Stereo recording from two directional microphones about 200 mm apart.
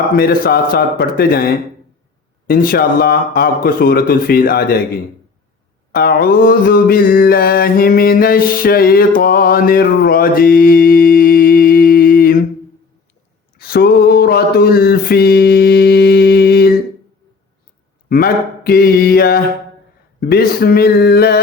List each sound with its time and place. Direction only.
0.2 s mantra: 50° left (ahead or behind)
13.6 s a sound: 50° left (ahead or behind)
18.1 s mantra: 50° left (ahead or behind)